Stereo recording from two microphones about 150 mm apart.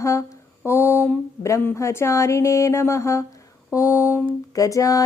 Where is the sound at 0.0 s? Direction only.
20° left (ahead or behind).